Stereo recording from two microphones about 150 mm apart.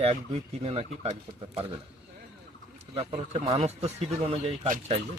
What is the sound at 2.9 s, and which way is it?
Speech, 40° right (ahead or behind).